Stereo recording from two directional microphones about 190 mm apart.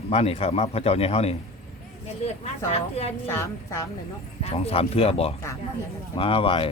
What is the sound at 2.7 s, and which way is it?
Speech, 30° left (ahead or behind).